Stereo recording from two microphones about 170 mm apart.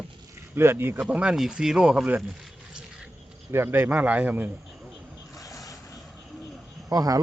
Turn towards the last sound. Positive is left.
turn(degrees=-20)  # may be behind; listen again after turning